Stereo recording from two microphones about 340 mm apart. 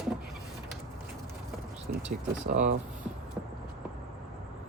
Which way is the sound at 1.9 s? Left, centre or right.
Right.